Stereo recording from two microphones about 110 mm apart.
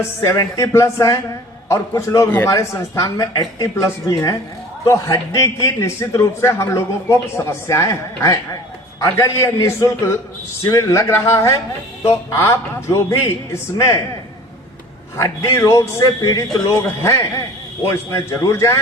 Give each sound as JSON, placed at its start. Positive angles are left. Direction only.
{"t": 0.0, "sound": "a man's voice", "side_deg": 30}
{"t": 15.2, "sound": "a man's voice", "side_deg": 25}